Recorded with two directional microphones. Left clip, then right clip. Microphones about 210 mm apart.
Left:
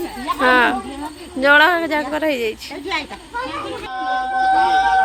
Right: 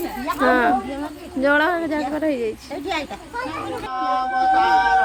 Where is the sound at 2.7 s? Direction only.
45° right (ahead or behind).